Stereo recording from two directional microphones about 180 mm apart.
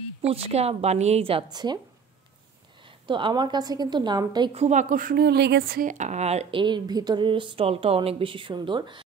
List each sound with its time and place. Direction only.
0.2 s a woman's voice: 35° right (ahead or behind)
2.8 s a woman's voice: 25° right (ahead or behind)